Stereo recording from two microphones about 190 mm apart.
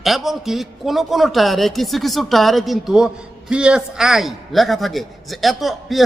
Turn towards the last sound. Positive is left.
turn(degrees=0)  # may be behind; listen again after turning